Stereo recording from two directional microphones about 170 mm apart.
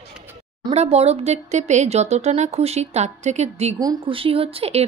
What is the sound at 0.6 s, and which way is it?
Speech, 40° right (ahead or behind).